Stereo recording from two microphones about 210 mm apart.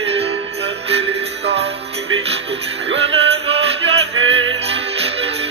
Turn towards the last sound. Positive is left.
turn(degrees=-30)  # may be behind; listen again after turning